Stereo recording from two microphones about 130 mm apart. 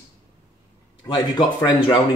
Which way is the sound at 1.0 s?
35° left (ahead or behind).